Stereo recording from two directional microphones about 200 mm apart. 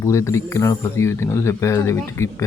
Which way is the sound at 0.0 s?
15° left (ahead or behind).